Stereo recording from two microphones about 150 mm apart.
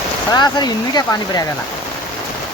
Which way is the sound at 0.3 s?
30° left (ahead or behind).